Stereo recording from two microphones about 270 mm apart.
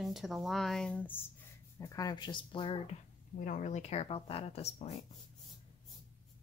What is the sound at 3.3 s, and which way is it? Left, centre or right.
Speech, left.